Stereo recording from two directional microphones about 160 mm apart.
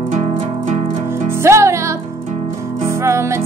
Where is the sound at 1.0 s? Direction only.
15° right (ahead or behind).